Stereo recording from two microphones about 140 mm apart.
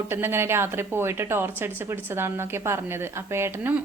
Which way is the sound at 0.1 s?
15° right (ahead or behind).